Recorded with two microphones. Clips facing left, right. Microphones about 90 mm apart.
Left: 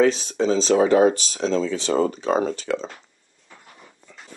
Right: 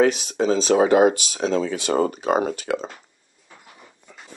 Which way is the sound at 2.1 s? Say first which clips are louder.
Even; 60° right (ahead or behind).